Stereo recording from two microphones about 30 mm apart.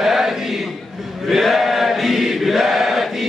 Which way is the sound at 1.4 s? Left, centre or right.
Centre.